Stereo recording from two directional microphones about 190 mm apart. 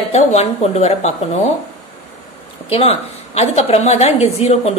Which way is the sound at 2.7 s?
30° left (ahead or behind).